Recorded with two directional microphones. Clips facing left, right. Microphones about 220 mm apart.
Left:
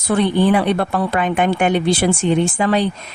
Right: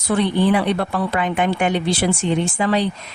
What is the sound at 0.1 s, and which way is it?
Speech, 50° left (ahead or behind).